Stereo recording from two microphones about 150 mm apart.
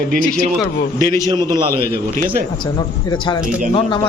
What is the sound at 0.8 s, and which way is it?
A man's voice, 90° left.